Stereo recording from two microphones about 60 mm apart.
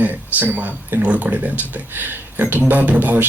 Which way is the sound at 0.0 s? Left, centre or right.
Right.